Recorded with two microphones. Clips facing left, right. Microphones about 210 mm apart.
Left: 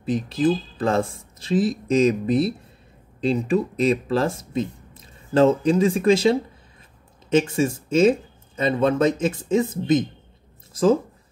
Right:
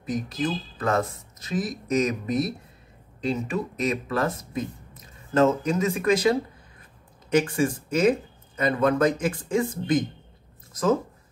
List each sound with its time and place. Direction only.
0.0 s speech: 30° left (ahead or behind)